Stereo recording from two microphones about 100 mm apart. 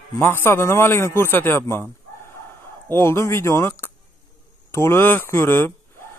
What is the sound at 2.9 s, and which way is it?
Speech, 25° left (ahead or behind).